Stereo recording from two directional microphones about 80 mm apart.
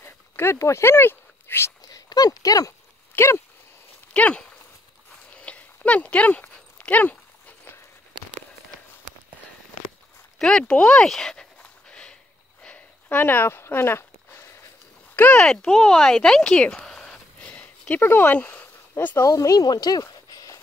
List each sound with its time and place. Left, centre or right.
0.0 s a sound: left
1.9 s speech: left
3.2 s speech: left
4.1 s speech: centre
5.4 s dog: centre
10.4 s speech: centre
11.9 s a sound: centre; by 14.5 s left
15.1 s speech: centre
15.4 s speech: centre; by 19.2 s left
19.2 s speech: left